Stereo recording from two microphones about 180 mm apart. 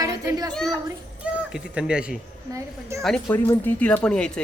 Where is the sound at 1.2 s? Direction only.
5° right (ahead or behind).